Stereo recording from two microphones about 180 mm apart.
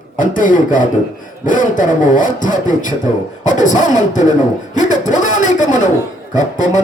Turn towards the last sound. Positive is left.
turn(degrees=45)  # may be behind; listen again after turning